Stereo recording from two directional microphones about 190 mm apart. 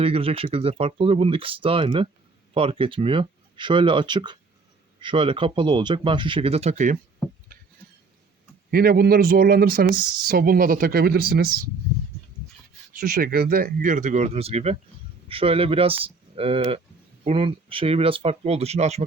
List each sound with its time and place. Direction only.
0.0 s speech: 30° right (ahead or behind)
8.7 s speech: 55° right (ahead or behind)
13.0 s speech: 50° right (ahead or behind); by 19.0 s 35° right (ahead or behind)